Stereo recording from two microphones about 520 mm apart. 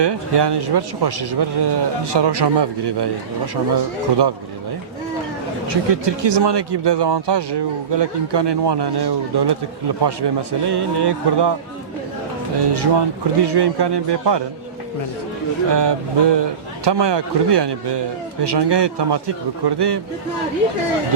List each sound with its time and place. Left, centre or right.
0.0 s a man's voice: right
5.6 s a man's voice: right
12.5 s a man's voice: right
15.7 s a man's voice: right